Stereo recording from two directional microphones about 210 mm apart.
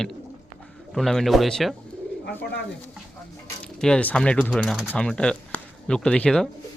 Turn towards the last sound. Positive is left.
turn(degrees=5)  # may be behind; listen again after turning